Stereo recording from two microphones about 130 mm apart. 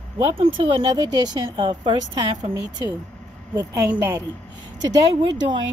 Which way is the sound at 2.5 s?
30° right (ahead or behind).